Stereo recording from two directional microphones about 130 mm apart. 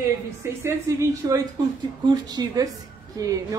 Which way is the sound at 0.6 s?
20° right (ahead or behind).